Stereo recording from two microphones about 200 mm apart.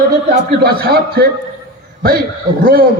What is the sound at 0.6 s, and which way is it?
A man's voice, 50° right (ahead or behind).